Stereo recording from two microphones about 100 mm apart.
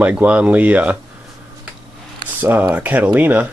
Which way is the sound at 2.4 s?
20° right (ahead or behind).